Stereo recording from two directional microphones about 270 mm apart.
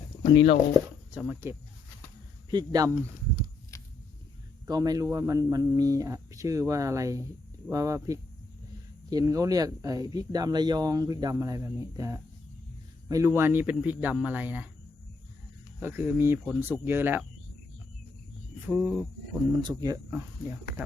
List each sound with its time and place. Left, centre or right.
0.2 s speech: centre
1.1 s speech: centre
3.7 s a sound: centre
4.6 s speech: centre
15.8 s speech: centre
18.7 s speech: centre